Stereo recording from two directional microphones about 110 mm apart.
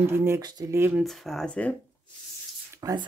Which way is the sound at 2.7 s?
35° right (ahead or behind).